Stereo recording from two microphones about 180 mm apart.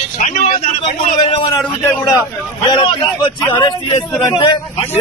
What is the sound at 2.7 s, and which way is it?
Speech, 25° left (ahead or behind).